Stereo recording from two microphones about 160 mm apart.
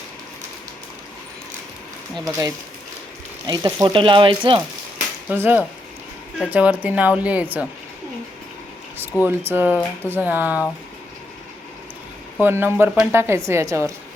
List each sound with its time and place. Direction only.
2.1 s speech: 20° right (ahead or behind)
5.3 s speech: 10° right (ahead or behind)
9.2 s speech: 15° right (ahead or behind)
12.4 s speech: 15° right (ahead or behind)